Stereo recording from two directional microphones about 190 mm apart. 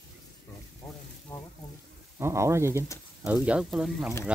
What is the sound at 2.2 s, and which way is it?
Sizzle, 15° right (ahead or behind).